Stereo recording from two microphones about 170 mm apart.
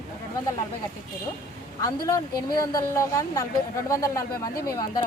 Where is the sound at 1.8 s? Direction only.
20° left (ahead or behind).